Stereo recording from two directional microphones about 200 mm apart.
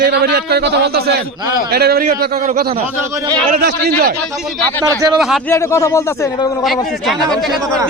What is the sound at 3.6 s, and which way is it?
Speech, 55° right (ahead or behind).